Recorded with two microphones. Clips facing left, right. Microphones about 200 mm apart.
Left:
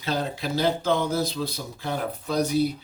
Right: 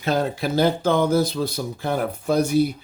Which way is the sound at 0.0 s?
50° right (ahead or behind).